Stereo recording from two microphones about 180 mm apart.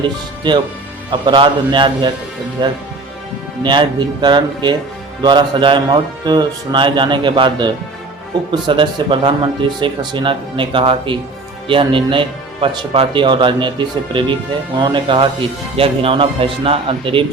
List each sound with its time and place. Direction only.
1.1 s speech: 25° right (ahead or behind)